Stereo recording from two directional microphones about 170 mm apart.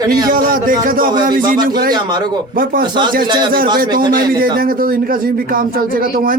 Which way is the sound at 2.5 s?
55° right (ahead or behind).